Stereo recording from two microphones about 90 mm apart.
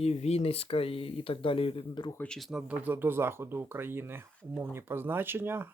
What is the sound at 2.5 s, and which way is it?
Speech, 15° right (ahead or behind).